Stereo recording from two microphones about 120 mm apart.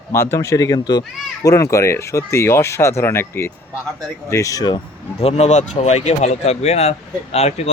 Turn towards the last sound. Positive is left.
turn(degrees=65)  # may be behind; listen again after turning